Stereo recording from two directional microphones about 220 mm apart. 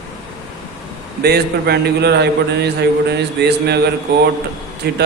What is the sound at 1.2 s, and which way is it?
Speech, 45° right (ahead or behind).